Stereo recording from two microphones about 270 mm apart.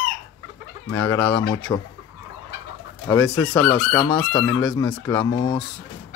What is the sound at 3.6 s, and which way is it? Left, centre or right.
Chicken, centre.